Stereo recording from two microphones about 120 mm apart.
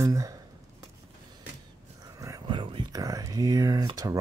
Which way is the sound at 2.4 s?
45° right (ahead or behind).